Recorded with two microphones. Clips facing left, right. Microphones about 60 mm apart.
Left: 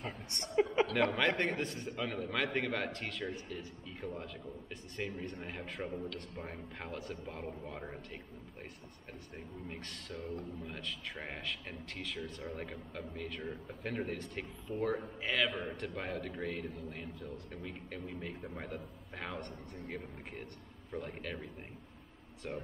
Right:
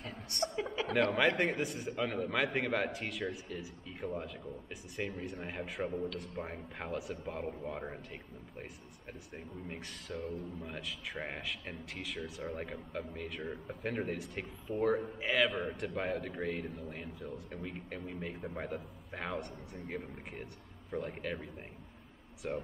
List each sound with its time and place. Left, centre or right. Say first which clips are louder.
0.4 s a sound: right 10 dB; right
1.1 s a man's voice: right 2 dB; centre
9.7 s a man's voice: right 4 dB; centre